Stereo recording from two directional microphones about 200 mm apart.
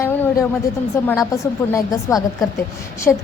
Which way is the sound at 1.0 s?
15° left (ahead or behind).